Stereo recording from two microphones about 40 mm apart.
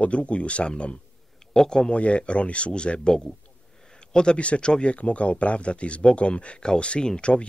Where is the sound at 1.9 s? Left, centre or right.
Left.